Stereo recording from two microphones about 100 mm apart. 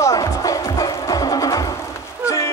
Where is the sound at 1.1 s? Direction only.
35° left (ahead or behind).